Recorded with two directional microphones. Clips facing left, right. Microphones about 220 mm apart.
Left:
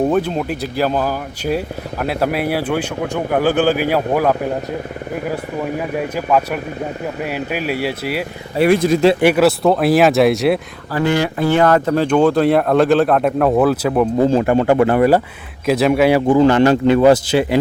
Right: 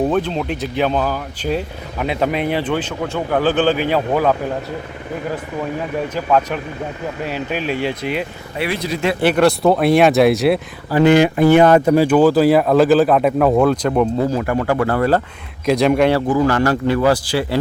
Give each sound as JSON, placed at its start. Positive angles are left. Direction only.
{"t": 0.1, "sound": "speech", "side_deg": 10}
{"t": 6.1, "sound": "speech", "side_deg": 10}
{"t": 8.5, "sound": "speech", "side_deg": 45}
{"t": 9.2, "sound": "speech", "side_deg": 5}
{"t": 10.9, "sound": "speech", "side_deg": -20}
{"t": 14.2, "sound": "speech", "side_deg": 25}
{"t": 15.6, "sound": "speech", "side_deg": 5}
{"t": 16.3, "sound": "speech", "side_deg": 25}